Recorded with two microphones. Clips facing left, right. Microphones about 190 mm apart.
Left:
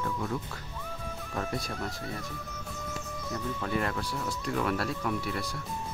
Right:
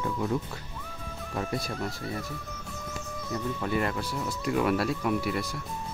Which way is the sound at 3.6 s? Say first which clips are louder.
Right 2 dB; 5° right (ahead or behind).